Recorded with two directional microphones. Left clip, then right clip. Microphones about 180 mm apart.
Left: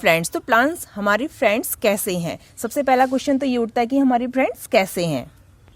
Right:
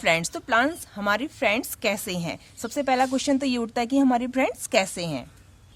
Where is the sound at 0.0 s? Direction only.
40° left (ahead or behind).